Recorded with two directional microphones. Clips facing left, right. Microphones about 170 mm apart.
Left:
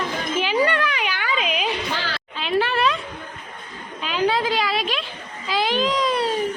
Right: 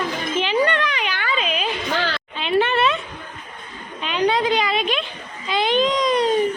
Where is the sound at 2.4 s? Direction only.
Centre (ahead or behind).